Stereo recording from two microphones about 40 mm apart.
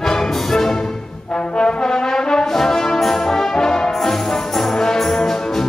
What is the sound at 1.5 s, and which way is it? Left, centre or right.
Brass instrument, left.